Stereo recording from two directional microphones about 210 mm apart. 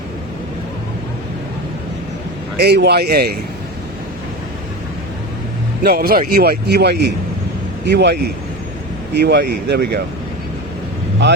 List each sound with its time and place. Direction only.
2.6 s a man's voice: 50° right (ahead or behind)
5.8 s a man's voice: 45° right (ahead or behind)